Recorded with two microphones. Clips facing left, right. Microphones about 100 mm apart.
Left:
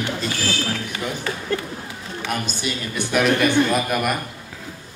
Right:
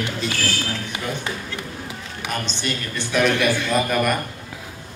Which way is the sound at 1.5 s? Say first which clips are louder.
Left 8 dB; 45° left (ahead or behind).